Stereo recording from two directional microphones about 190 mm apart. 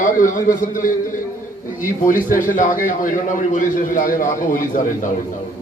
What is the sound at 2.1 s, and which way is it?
A man's voice, 45° left (ahead or behind).